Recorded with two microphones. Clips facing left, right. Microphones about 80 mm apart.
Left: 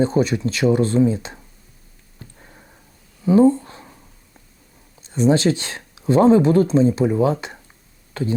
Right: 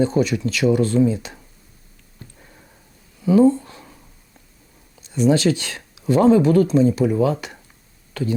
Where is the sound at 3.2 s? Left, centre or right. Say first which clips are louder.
Left 1 dB; left.